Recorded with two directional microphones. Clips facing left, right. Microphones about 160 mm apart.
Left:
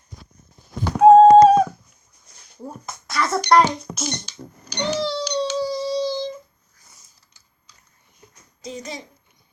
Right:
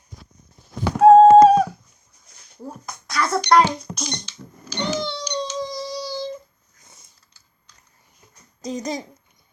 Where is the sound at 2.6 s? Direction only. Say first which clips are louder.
Even; centre (ahead or behind).